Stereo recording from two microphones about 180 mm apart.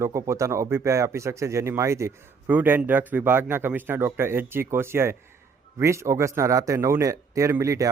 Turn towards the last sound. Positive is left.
turn(degrees=-15)  # may be behind; listen again after turning